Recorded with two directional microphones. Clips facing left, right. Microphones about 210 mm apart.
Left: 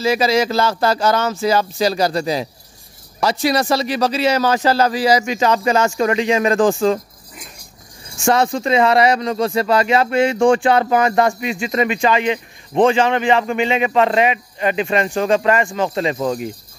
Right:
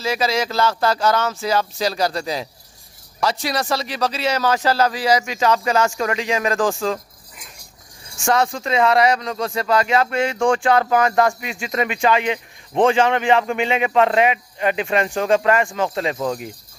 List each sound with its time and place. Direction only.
0.0 s speech: 5° left (ahead or behind)
6.6 s speech: 25° left (ahead or behind)
8.6 s speech: 5° left (ahead or behind)
15.7 s speech: 10° left (ahead or behind)